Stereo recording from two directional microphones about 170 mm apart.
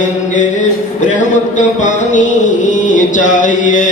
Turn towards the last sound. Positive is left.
turn(degrees=50)  # may be behind; listen again after turning